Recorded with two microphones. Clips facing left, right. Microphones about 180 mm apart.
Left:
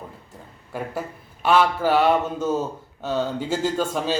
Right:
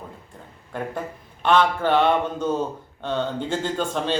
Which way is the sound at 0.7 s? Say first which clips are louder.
Even; 5° left (ahead or behind).